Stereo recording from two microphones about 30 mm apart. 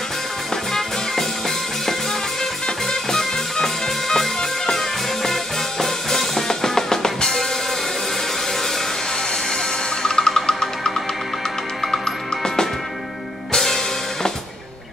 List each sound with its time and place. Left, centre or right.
2.9 s music: centre
10.0 s music: left